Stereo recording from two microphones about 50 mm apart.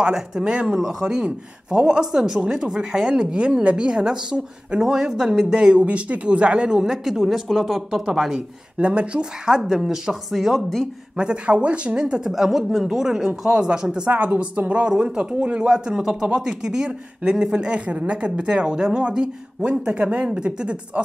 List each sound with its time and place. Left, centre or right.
0.0 s a woman's voice: centre
8.7 s speech: right
9.6 s speech: centre
11.1 s speech: right
12.3 s a woman's voice: centre
14.1 s speech: right